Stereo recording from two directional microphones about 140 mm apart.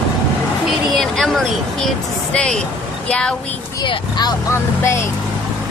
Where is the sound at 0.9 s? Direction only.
5° left (ahead or behind).